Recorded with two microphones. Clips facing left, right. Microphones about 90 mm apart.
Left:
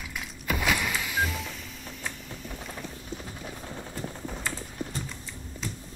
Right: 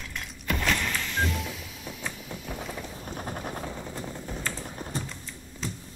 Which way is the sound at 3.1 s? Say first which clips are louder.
Right 4 dB; 50° right (ahead or behind).